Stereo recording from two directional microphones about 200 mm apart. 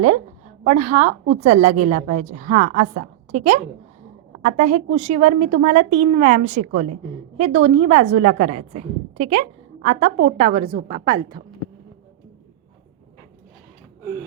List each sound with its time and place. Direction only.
0.6 s a woman's voice: 40° right (ahead or behind); by 11.3 s 25° right (ahead or behind)